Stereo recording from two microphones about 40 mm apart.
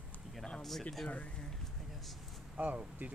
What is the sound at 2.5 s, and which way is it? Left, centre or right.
Speech, right.